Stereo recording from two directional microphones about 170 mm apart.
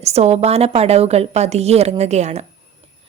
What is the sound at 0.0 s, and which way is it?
A woman's voice, 40° right (ahead or behind).